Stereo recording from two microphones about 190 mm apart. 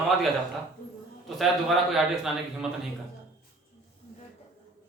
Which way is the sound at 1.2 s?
Centre (ahead or behind).